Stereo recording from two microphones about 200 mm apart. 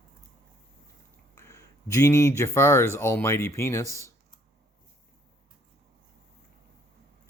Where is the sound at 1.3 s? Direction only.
15° left (ahead or behind).